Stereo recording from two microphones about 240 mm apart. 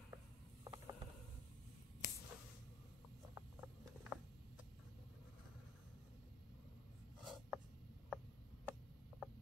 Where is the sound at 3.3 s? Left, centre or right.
Centre.